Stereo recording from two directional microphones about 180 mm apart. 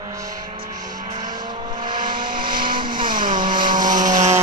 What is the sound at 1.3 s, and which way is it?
Vehicle, 25° right (ahead or behind).